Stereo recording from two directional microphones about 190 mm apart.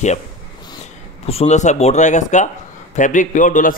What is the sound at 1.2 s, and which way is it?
A man's voice, 35° left (ahead or behind).